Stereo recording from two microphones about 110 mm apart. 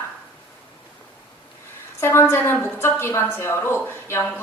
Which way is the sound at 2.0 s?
20° left (ahead or behind).